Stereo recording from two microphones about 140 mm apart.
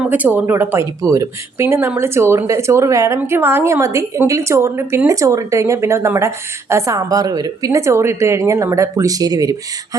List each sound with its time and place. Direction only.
0.0 s a woman's voice: 10° right (ahead or behind); by 9.6 s 25° right (ahead or behind)